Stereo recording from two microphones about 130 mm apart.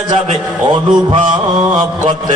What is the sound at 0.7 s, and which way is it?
Mantra, 35° right (ahead or behind).